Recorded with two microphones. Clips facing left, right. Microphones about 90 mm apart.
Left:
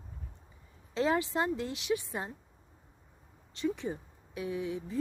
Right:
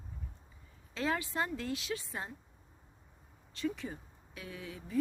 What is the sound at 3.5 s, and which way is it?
Speech, 20° left (ahead or behind).